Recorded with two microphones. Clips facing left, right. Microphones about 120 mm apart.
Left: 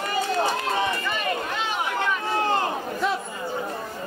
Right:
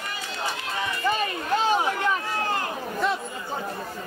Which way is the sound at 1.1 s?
35° right (ahead or behind).